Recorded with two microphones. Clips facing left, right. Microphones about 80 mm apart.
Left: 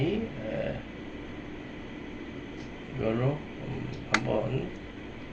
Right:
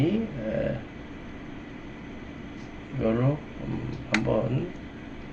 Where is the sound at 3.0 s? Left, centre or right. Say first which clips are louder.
Right 4 dB; centre.